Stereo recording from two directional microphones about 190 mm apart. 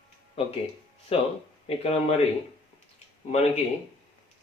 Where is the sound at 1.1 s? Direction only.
30° left (ahead or behind).